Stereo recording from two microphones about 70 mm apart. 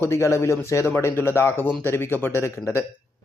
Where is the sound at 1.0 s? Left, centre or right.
Left.